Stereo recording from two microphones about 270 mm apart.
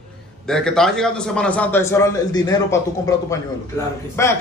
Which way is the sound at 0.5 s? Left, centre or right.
Centre.